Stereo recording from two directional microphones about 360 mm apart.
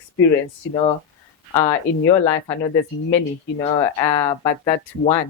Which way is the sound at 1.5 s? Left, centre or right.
Centre.